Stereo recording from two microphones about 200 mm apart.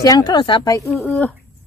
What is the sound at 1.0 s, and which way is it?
Speech, 10° left (ahead or behind).